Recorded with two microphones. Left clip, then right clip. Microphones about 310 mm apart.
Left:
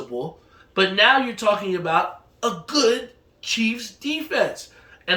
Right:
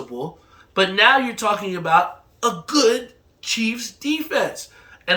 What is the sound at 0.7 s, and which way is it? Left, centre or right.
Speech, centre.